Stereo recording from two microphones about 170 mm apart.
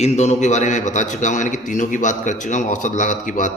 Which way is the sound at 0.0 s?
40° left (ahead or behind).